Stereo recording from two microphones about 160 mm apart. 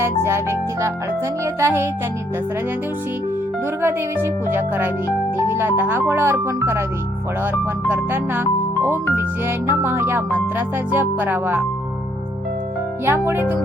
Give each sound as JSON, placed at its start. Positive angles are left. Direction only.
{"t": 0.0, "sound": "speech", "side_deg": -15}
{"t": 4.5, "sound": "speech", "side_deg": -15}
{"t": 7.9, "sound": "speech", "side_deg": -15}
{"t": 9.6, "sound": "speech", "side_deg": -15}
{"t": 13.1, "sound": "speech", "side_deg": -15}